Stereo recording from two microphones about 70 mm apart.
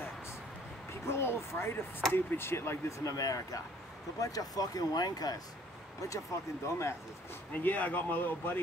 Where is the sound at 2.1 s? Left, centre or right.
Left.